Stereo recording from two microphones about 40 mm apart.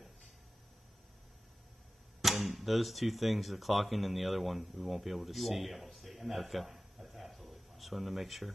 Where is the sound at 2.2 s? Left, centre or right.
Centre.